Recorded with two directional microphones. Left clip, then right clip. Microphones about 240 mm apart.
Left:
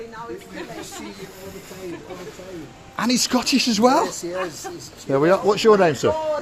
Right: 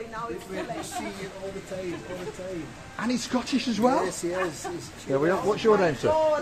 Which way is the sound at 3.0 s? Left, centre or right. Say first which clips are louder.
Left 8 dB; left.